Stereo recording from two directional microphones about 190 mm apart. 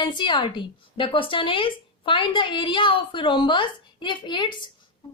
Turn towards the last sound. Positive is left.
turn(degrees=25)  # may be behind; listen again after turning